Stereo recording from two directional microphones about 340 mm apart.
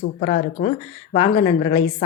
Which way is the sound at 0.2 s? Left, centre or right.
Left.